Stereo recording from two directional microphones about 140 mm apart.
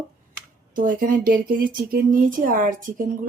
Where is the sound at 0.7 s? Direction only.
75° right (ahead or behind).